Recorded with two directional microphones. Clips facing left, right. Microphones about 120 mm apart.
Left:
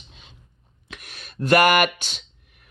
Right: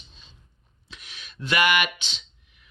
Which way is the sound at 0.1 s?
65° left (ahead or behind).